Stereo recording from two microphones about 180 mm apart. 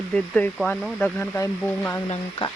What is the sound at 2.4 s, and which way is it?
Speech, 30° left (ahead or behind).